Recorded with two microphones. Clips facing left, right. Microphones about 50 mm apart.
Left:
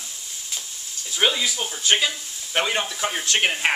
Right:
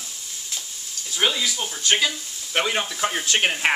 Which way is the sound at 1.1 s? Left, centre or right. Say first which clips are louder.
Left 1 dB; centre.